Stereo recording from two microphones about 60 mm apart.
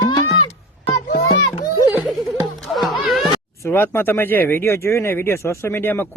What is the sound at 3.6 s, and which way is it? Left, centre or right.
Speech, left.